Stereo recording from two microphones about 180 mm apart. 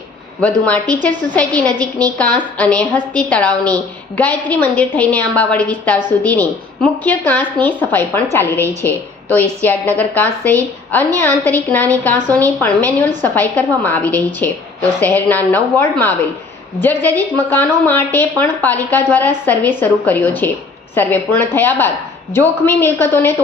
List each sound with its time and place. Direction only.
0.4 s a woman's voice: 5° left (ahead or behind)
1.7 s a woman's voice: 20° right (ahead or behind)
2.1 s a woman's voice: 5° left (ahead or behind)
9.6 s a woman's voice: 10° left (ahead or behind)